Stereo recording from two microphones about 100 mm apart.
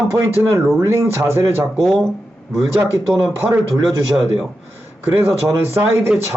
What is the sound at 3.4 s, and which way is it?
Speech, 30° right (ahead or behind).